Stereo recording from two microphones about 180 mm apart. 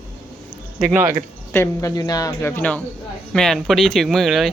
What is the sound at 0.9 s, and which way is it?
Speech, 15° right (ahead or behind).